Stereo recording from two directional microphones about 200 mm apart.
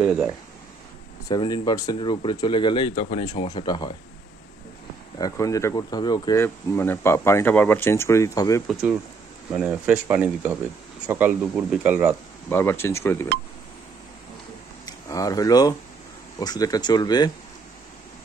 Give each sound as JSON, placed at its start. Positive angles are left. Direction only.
{"t": 0.0, "sound": "speech", "side_deg": -5}
{"t": 1.3, "sound": "speech", "side_deg": 20}
{"t": 5.2, "sound": "speech", "side_deg": 15}
{"t": 9.5, "sound": "speech", "side_deg": -5}
{"t": 12.4, "sound": "speech", "side_deg": 10}
{"t": 14.9, "sound": "speech", "side_deg": 15}